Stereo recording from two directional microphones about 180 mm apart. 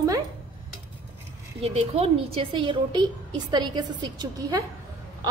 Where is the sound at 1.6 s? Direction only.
35° right (ahead or behind).